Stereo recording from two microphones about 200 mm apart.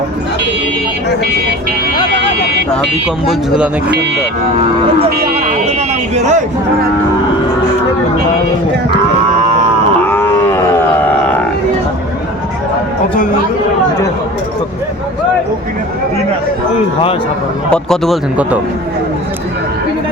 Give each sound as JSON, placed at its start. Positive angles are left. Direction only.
{"t": 2.2, "sound": "speech", "side_deg": -60}
{"t": 3.2, "sound": "speech", "side_deg": -5}
{"t": 6.1, "sound": "speech", "side_deg": -35}
{"t": 10.1, "sound": "wild animals", "side_deg": 10}
{"t": 17.7, "sound": "speech", "side_deg": 0}